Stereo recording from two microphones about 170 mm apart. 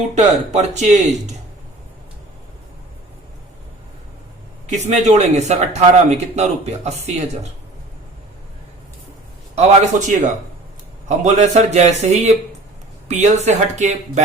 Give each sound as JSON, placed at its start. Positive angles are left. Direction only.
{"t": 0.1, "sound": "speech", "side_deg": -40}
{"t": 4.6, "sound": "speech", "side_deg": -45}
{"t": 9.6, "sound": "speech", "side_deg": -40}